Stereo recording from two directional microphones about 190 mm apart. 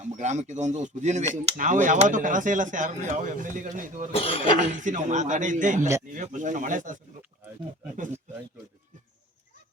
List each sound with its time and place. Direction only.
0.0 s speech: 40° right (ahead or behind)
4.1 s speech: 30° left (ahead or behind)
4.7 s speech: 40° right (ahead or behind)